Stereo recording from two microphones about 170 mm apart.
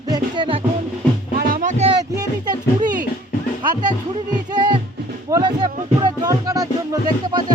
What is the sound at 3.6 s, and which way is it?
Music, 25° right (ahead or behind).